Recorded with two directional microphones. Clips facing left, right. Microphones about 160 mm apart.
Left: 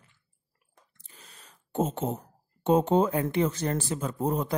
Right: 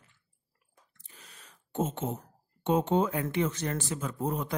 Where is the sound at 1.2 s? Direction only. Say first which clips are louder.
Left 2 dB; 35° left (ahead or behind).